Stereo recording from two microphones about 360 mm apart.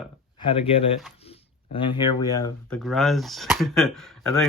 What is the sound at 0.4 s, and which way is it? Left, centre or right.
Speech, centre.